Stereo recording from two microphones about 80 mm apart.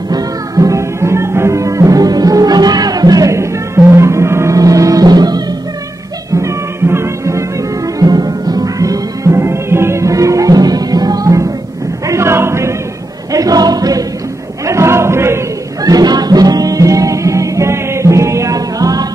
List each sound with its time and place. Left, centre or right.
0.1 s music: right
3.3 s music: right
4.6 s music: right
6.3 s music: right
12.1 s choir: right
13.3 s choir: right
14.7 s a sound: right
15.8 s music: right